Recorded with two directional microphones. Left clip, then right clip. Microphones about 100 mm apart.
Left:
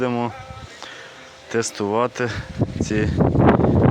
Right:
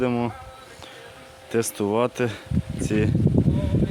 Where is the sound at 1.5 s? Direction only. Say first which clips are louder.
Left 2 dB; 25° right (ahead or behind).